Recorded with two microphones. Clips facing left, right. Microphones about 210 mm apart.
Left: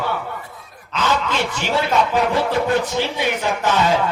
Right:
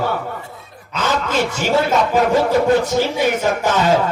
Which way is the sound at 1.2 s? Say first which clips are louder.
Right 4 dB; 45° right (ahead or behind).